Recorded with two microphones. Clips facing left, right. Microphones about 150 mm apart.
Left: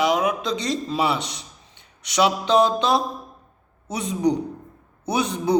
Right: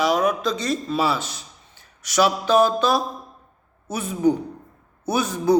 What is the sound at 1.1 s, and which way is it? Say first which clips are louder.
Speech: left 1 dB; 70° left (ahead or behind).